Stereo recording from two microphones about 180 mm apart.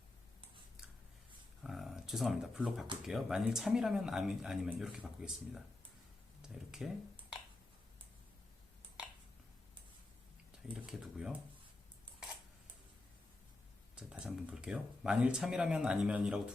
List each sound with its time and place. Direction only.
1.6 s speech: centre (ahead or behind)
10.8 s speech: 5° right (ahead or behind)
13.9 s speech: 5° right (ahead or behind)